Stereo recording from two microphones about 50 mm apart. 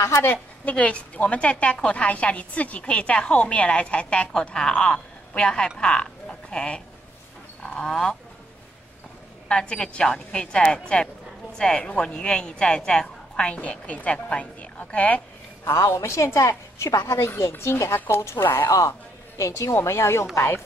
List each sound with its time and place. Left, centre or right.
0.7 s a woman's voice: left
7.8 s speech: centre
9.5 s a woman's voice: centre
15.6 s a woman's voice: left
17.4 s speech: left
19.3 s a woman's voice: left
19.7 s speech: left